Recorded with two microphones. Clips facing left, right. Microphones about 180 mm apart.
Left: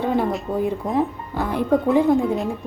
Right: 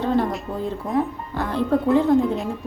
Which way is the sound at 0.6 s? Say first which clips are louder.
Left 1 dB; 15° left (ahead or behind).